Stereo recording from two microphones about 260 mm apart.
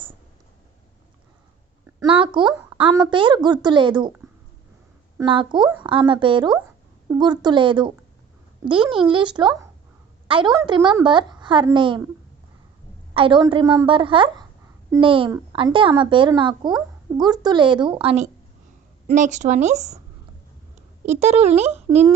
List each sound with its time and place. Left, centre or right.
2.0 s a woman's voice: centre
5.1 s a child's voice: centre
13.1 s a woman's voice: centre
21.1 s a woman's voice: right